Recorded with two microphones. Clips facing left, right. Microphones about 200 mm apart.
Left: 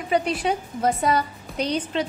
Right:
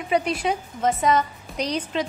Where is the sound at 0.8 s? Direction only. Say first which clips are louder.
Right 2 dB; 35° left (ahead or behind).